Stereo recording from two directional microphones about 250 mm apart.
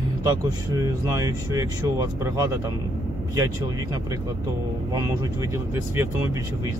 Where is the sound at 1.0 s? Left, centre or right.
Centre.